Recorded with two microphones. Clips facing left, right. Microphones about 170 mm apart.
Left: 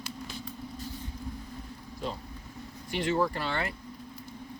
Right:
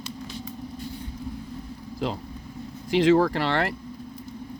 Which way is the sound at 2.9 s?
90° right.